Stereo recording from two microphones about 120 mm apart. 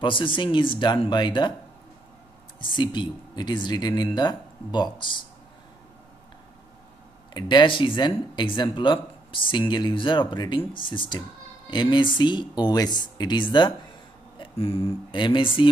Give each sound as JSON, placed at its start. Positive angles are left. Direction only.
{"t": 0.0, "sound": "speech", "side_deg": 45}
{"t": 2.6, "sound": "speech", "side_deg": 40}
{"t": 7.3, "sound": "speech", "side_deg": 40}
{"t": 14.4, "sound": "speech", "side_deg": 55}
{"t": 15.1, "sound": "speech", "side_deg": 45}